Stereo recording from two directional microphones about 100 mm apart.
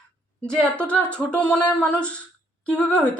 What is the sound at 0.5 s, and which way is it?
Speech, 10° left (ahead or behind).